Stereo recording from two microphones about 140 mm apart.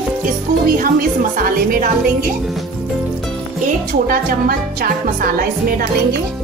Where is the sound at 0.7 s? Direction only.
85° right.